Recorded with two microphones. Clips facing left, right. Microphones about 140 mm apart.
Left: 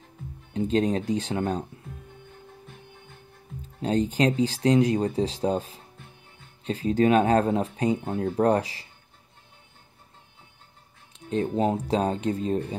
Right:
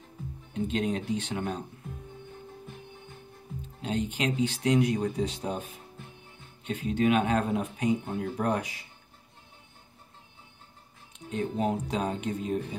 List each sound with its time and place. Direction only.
0.5 s speech: 35° left (ahead or behind)
3.8 s speech: 35° left (ahead or behind)
11.1 s speech: 30° left (ahead or behind)